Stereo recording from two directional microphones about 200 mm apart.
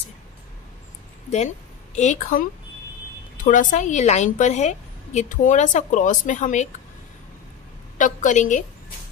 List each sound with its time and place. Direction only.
2.0 s a woman's voice: 35° left (ahead or behind)
3.4 s a woman's voice: 40° left (ahead or behind)
8.0 s a woman's voice: 40° left (ahead or behind)